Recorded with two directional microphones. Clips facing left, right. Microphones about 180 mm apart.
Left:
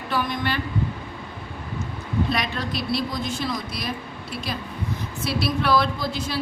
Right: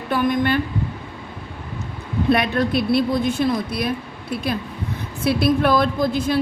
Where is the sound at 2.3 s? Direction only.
55° right (ahead or behind).